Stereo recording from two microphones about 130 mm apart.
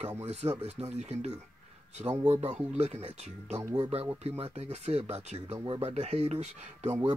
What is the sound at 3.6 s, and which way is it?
Speech, 30° right (ahead or behind).